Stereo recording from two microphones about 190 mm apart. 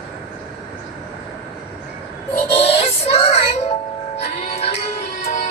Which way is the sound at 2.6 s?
35° left (ahead or behind).